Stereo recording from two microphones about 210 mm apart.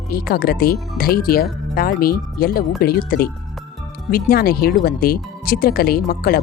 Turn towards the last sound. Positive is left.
turn(degrees=45)  # may be behind; listen again after turning